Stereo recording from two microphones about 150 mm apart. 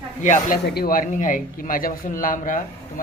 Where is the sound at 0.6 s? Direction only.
85° left.